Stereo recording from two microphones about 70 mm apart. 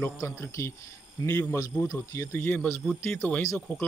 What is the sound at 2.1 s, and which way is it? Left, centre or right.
Speech, left.